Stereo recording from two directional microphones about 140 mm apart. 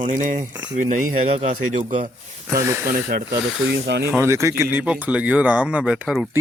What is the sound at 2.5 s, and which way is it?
Speech, 20° right (ahead or behind).